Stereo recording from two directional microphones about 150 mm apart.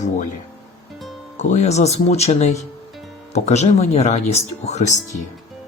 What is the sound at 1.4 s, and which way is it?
Speech, 50° left (ahead or behind).